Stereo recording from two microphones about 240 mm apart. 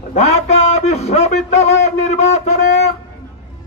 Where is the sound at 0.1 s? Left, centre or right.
Left.